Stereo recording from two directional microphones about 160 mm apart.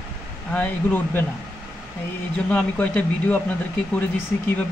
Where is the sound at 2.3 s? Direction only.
10° left (ahead or behind).